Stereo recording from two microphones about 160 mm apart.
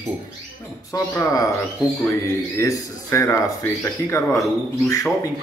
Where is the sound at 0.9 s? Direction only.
20° left (ahead or behind).